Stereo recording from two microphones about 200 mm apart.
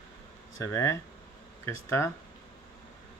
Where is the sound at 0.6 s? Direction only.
15° left (ahead or behind).